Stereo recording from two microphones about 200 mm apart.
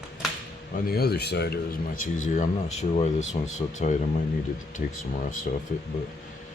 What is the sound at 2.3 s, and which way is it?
Speech, 35° left (ahead or behind).